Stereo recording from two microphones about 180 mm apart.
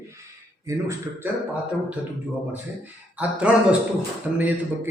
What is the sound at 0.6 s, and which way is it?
A man's voice, 15° right (ahead or behind).